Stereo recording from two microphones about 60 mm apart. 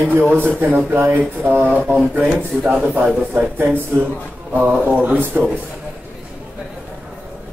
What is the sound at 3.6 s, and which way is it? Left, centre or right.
Speech, right.